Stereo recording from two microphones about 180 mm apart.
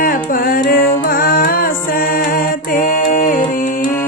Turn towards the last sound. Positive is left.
turn(degrees=45)  # may be behind; listen again after turning